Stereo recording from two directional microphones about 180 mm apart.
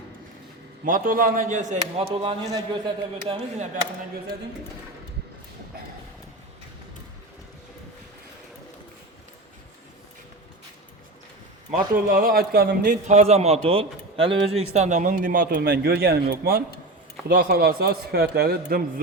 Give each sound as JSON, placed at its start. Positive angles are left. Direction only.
{"t": 0.9, "sound": "speech", "side_deg": -50}
{"t": 2.4, "sound": "a man's voice", "side_deg": -20}
{"t": 11.7, "sound": "speech", "side_deg": -50}
{"t": 13.1, "sound": "a man's voice", "side_deg": -40}